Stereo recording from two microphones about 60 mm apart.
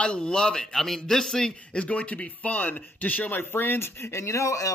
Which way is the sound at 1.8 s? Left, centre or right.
Left.